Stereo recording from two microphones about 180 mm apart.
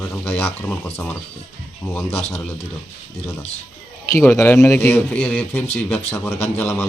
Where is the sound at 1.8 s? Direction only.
15° left (ahead or behind).